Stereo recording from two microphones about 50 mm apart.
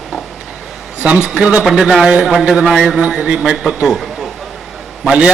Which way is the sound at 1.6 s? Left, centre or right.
Centre.